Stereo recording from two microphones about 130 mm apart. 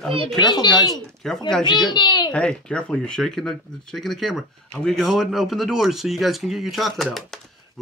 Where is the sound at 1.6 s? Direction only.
35° left (ahead or behind).